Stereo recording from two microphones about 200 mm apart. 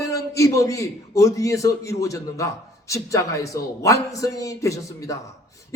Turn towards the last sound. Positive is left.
turn(degrees=15)  # may be behind; listen again after turning